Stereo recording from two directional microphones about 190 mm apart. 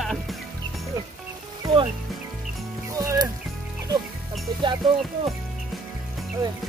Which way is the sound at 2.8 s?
20° right (ahead or behind).